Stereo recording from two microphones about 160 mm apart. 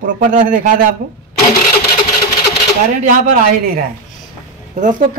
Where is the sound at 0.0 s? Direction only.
55° right (ahead or behind).